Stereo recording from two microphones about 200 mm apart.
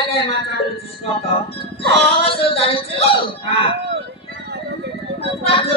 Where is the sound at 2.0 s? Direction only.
30° left (ahead or behind).